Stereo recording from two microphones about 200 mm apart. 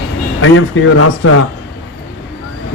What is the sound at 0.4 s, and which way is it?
Speech, 80° left.